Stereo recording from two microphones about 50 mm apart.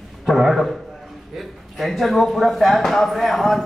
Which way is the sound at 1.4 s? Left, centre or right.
Centre.